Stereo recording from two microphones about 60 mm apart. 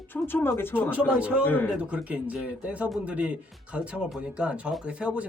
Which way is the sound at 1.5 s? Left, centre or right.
Left.